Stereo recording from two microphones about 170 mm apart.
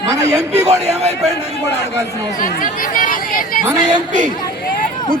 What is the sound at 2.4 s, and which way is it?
Speech, 50° left (ahead or behind).